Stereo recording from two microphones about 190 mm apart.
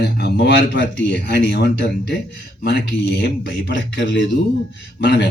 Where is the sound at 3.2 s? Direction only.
65° left (ahead or behind).